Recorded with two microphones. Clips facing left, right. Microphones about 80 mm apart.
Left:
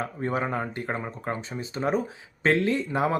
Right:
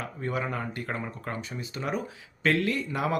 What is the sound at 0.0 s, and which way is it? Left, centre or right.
Speech, left.